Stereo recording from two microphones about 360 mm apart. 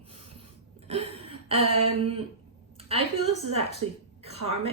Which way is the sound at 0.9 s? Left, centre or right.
Centre.